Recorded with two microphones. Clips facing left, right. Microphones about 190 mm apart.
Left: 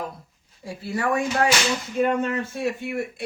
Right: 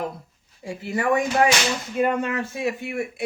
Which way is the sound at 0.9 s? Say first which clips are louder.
Right 2 dB; 15° right (ahead or behind).